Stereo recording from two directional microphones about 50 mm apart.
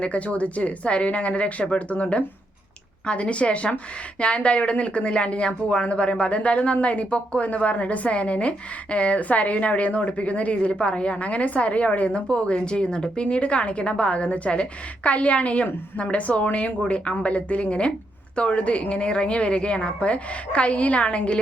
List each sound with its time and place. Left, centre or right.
0.0 s a woman's voice: left
12.3 s a woman's voice: centre